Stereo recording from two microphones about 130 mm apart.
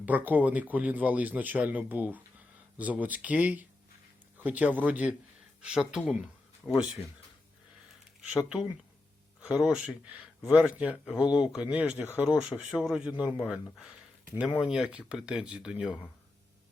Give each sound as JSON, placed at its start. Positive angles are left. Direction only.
{"t": 0.0, "sound": "speech", "side_deg": -10}
{"t": 6.6, "sound": "speech", "side_deg": 15}
{"t": 8.3, "sound": "speech", "side_deg": -5}
{"t": 14.7, "sound": "speech", "side_deg": -5}